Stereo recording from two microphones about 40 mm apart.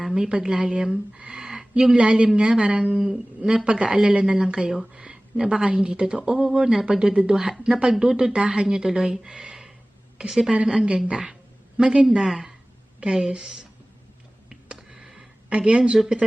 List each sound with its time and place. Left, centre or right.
0.1 s a woman's voice: right
10.6 s a woman's voice: right
14.5 s a sound: centre
15.4 s speech: right